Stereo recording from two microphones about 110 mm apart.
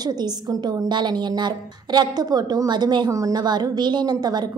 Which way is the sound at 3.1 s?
30° right (ahead or behind).